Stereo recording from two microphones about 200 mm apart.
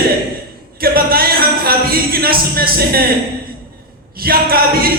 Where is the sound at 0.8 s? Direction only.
50° right (ahead or behind).